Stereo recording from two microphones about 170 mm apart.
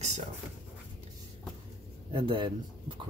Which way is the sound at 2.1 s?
30° right (ahead or behind).